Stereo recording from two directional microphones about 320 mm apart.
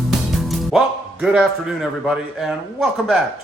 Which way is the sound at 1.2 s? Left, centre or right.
Centre.